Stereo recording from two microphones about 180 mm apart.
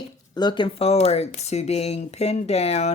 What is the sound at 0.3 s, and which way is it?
Speech, 25° left (ahead or behind).